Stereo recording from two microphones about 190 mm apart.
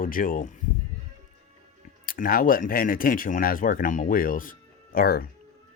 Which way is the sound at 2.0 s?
45° left (ahead or behind).